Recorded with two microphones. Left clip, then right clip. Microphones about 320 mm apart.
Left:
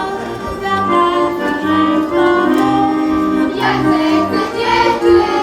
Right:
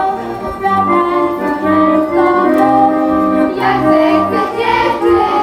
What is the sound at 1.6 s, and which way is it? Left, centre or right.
Music, centre.